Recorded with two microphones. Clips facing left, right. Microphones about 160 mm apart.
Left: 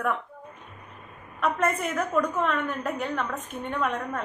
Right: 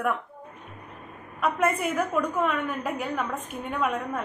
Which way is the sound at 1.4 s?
5° right (ahead or behind).